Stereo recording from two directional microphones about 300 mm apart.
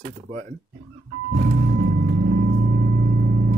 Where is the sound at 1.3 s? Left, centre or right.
Right.